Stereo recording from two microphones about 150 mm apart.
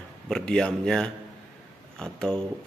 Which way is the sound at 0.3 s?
5° left (ahead or behind).